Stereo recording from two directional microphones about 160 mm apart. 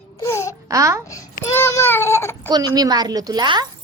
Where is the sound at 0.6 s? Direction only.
20° right (ahead or behind).